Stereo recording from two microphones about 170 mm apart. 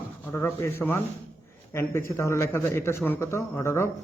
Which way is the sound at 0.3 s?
15° left (ahead or behind).